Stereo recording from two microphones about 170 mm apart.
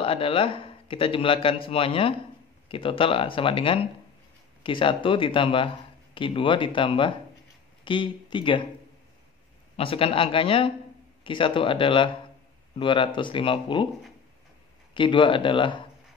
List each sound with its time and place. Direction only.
0.0 s speech: 35° left (ahead or behind)
9.8 s speech: 35° left (ahead or behind)
15.0 s speech: 30° left (ahead or behind)